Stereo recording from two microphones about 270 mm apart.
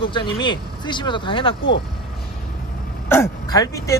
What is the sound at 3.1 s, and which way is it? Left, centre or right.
Speech, centre.